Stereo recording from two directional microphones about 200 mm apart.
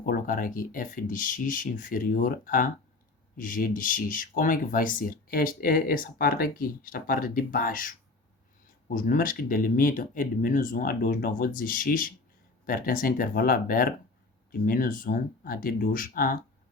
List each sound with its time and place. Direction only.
0.0 s speech: 45° left (ahead or behind)
9.0 s speech: 45° left (ahead or behind)